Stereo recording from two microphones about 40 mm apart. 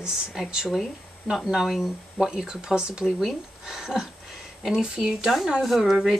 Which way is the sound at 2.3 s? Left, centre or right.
Centre.